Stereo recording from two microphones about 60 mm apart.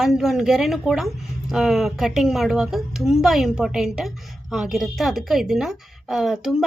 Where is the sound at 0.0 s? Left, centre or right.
Centre.